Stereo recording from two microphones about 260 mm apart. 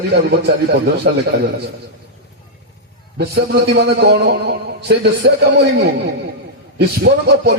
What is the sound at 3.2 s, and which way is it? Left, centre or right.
A man's voice, right.